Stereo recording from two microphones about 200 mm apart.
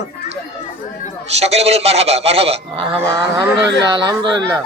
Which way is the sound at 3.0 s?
15° right (ahead or behind).